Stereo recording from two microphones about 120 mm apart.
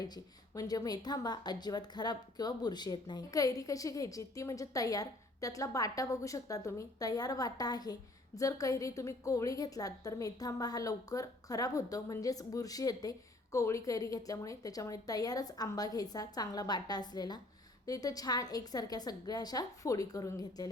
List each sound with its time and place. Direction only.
0.0 s a woman's voice: 30° left (ahead or behind)